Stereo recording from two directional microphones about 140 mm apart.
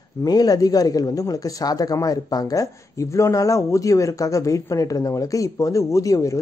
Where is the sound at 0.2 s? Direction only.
25° left (ahead or behind).